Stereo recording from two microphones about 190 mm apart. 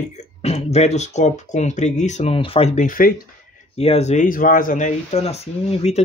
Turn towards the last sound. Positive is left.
turn(degrees=35)  # may be behind; listen again after turning